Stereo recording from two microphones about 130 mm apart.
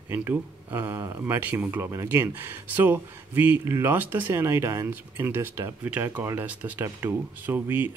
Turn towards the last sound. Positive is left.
turn(degrees=-15)  # may be behind; listen again after turning